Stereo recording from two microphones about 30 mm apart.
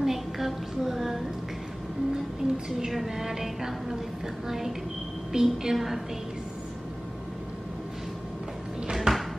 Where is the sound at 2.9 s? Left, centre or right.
Centre.